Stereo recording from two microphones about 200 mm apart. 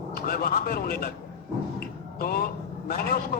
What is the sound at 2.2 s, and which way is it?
A man's voice, 50° left (ahead or behind).